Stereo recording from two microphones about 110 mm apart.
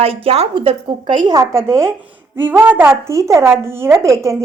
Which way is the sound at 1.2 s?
30° right (ahead or behind).